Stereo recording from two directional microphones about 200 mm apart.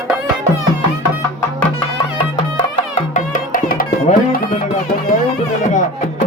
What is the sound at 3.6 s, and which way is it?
Music, 45° left (ahead or behind).